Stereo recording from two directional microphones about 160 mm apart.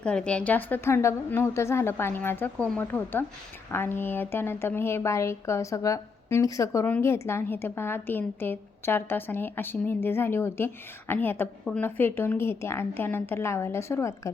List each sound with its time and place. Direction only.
0.0 s a woman's voice: 5° left (ahead or behind)